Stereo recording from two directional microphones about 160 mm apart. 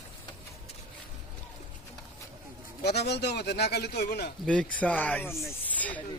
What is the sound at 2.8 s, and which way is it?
Speech, 90° left.